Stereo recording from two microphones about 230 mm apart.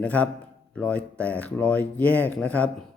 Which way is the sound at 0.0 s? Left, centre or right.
Centre.